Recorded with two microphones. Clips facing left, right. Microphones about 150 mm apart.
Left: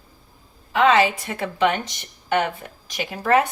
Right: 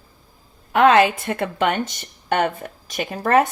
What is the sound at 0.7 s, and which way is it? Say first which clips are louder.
Speech: right 3 dB; 55° right (ahead or behind).